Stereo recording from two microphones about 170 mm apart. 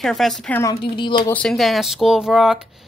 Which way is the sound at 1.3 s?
Centre (ahead or behind).